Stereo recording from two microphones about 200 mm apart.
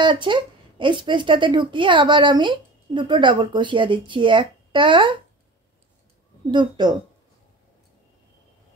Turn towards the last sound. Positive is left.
turn(degrees=-20)  # may be behind; listen again after turning